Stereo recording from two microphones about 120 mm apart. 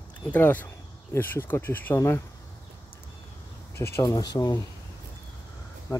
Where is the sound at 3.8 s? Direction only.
25° left (ahead or behind).